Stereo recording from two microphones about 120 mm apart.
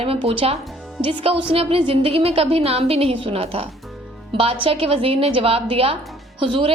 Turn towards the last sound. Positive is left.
turn(degrees=-45)  # may be behind; listen again after turning